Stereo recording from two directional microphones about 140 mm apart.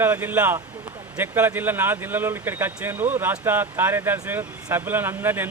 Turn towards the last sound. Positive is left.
turn(degrees=-15)  # may be behind; listen again after turning